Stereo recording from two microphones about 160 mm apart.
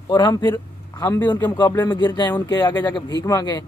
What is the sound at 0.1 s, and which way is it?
Speech, 25° left (ahead or behind).